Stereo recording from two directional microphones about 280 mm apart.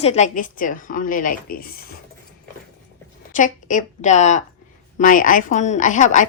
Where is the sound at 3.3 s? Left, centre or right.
Left.